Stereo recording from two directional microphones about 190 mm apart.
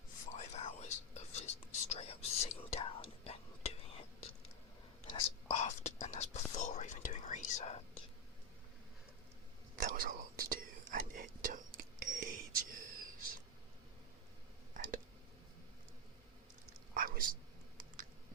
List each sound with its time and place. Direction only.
0.3 s whispering: 35° left (ahead or behind)
9.7 s whispering: 45° right (ahead or behind)
14.7 s a sound: 45° right (ahead or behind)
16.9 s whispering: 45° right (ahead or behind)